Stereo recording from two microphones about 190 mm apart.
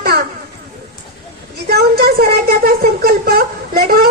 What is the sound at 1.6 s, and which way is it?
Speech, 55° right (ahead or behind).